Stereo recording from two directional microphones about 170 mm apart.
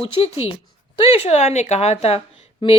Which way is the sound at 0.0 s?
35° left (ahead or behind).